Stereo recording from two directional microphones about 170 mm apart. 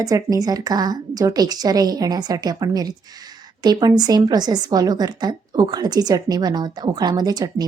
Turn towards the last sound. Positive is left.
turn(degrees=-25)  # may be behind; listen again after turning